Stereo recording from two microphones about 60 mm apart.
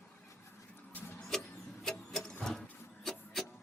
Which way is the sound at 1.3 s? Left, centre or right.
Centre.